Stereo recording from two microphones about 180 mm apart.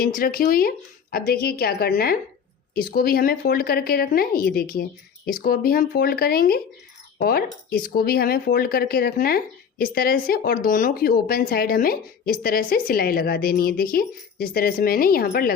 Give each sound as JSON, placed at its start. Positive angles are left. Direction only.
{"t": 0.0, "sound": "speech", "side_deg": 50}